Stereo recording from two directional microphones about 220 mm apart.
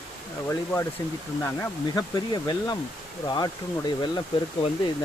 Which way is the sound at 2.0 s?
20° left (ahead or behind).